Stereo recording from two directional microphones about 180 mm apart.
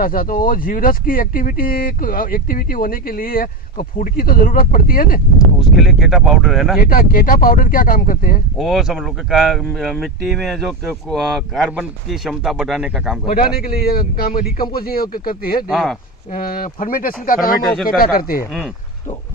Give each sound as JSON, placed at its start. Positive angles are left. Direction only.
{"t": 0.0, "sound": "speech", "side_deg": 50}
{"t": 5.6, "sound": "speech", "side_deg": 0}
{"t": 6.9, "sound": "speech", "side_deg": 50}
{"t": 8.5, "sound": "speech", "side_deg": 0}
{"t": 13.6, "sound": "speech", "side_deg": 55}
{"t": 15.7, "sound": "speech", "side_deg": 0}
{"t": 16.3, "sound": "speech", "side_deg": 50}